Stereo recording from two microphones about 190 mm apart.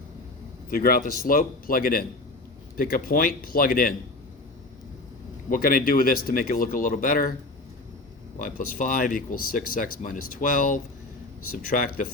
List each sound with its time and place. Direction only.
0.7 s speech: 50° left (ahead or behind)
5.5 s speech: 50° left (ahead or behind)
8.4 s speech: 45° left (ahead or behind)